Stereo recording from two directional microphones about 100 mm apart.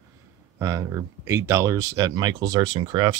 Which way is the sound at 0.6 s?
35° right (ahead or behind).